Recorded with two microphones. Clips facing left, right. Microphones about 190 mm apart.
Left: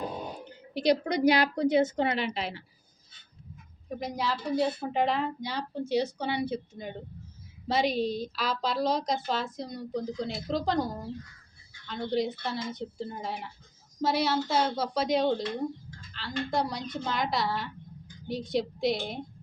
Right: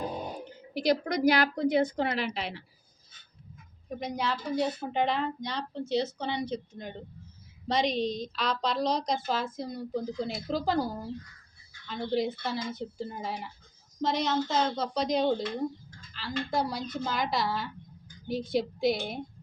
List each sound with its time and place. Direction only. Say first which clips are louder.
0.7 s a woman's voice: left 2 dB; 25° left (ahead or behind)
2.0 s a woman's voice: left 1 dB; centre (ahead or behind)
3.8 s a woman's voice: even; centre (ahead or behind)
11.9 s a woman's voice: even; centre (ahead or behind)